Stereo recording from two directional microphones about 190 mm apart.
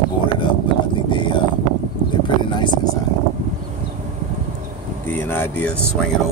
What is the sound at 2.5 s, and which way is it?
Speech, 25° left (ahead or behind).